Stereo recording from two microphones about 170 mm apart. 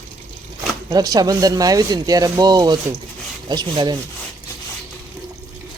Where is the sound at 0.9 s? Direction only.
20° right (ahead or behind).